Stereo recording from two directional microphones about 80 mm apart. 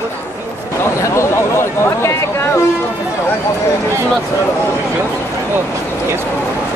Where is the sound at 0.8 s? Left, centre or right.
Left.